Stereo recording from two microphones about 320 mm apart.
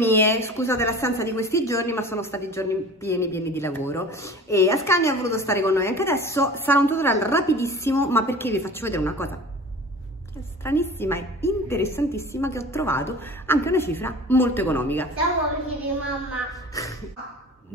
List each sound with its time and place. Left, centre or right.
0.0 s speech: centre
10.6 s speech: centre
16.7 s speech: centre